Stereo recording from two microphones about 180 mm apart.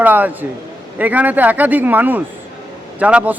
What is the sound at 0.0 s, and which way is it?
A man's voice, 10° right (ahead or behind).